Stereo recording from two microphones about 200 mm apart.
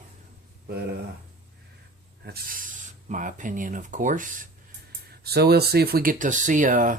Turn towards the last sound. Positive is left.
turn(degrees=-40)  # may be behind; listen again after turning